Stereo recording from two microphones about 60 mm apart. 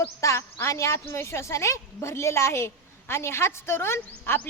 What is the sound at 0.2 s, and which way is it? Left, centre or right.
A woman's voice, left.